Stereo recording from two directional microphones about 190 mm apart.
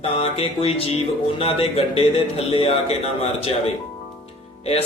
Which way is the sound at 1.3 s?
30° left (ahead or behind).